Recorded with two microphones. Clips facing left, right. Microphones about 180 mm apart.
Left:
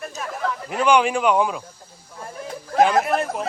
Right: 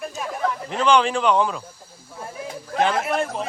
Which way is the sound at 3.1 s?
Centre (ahead or behind).